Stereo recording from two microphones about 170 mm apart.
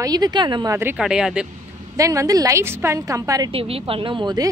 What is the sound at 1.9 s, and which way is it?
A woman's voice, 20° right (ahead or behind).